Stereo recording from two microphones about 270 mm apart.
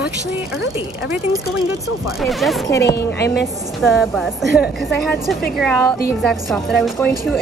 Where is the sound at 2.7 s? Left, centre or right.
Centre.